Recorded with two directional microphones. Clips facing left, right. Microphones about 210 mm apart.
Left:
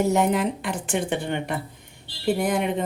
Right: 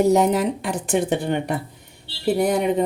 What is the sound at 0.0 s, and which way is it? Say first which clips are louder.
Speech: right 4 dB; 35° right (ahead or behind).